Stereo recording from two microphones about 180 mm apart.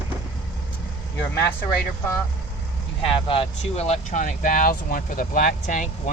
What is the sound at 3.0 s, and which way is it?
Speech, 30° left (ahead or behind).